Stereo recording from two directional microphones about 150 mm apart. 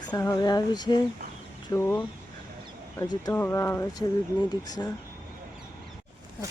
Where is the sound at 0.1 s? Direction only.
25° left (ahead or behind).